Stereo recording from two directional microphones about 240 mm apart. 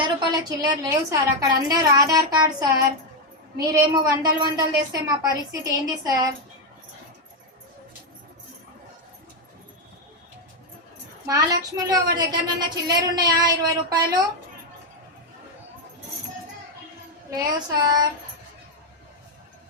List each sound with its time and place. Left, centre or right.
0.0 s a woman's voice: centre
3.7 s a woman's voice: centre
11.3 s a woman's voice: centre
17.3 s a woman's voice: centre